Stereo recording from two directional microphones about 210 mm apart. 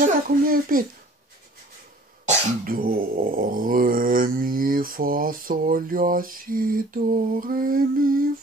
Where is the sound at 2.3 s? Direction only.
40° right (ahead or behind).